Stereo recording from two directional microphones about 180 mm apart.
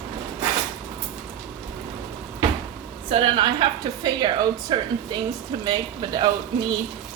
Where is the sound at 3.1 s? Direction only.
30° right (ahead or behind).